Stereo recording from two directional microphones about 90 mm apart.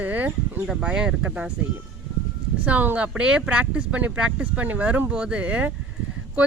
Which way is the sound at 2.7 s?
15° right (ahead or behind).